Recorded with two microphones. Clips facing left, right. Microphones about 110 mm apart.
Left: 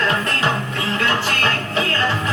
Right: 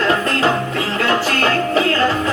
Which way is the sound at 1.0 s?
35° right (ahead or behind).